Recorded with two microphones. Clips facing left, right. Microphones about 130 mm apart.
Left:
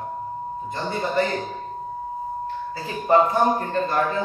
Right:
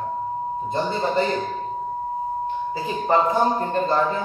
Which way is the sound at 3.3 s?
25° right (ahead or behind).